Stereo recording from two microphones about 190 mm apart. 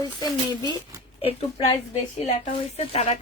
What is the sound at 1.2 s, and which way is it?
Speech, 30° left (ahead or behind).